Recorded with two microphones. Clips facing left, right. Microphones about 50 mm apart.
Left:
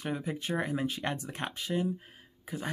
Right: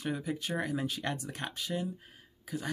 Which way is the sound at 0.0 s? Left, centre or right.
Left.